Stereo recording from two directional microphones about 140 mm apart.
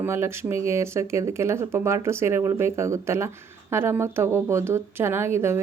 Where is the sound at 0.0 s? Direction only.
20° right (ahead or behind).